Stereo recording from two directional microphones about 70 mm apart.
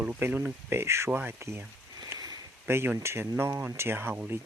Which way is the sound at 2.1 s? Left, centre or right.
Right.